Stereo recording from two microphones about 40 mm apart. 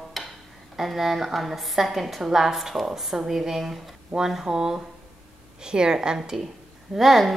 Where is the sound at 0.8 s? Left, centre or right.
Centre.